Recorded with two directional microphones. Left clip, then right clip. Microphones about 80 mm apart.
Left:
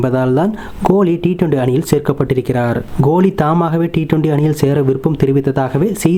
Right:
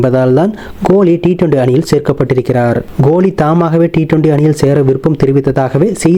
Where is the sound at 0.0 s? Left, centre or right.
Right.